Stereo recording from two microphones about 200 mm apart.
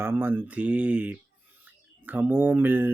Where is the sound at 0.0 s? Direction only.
10° right (ahead or behind).